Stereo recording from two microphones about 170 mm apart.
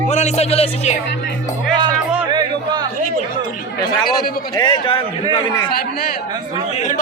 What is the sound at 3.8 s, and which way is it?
A man's voice, 25° left (ahead or behind).